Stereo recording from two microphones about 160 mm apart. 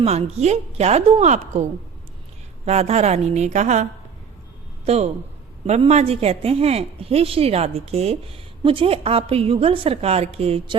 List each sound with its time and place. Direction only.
0.0 s a woman's voice: 40° right (ahead or behind)
2.6 s a woman's voice: 45° right (ahead or behind)
4.9 s a woman's voice: 45° right (ahead or behind)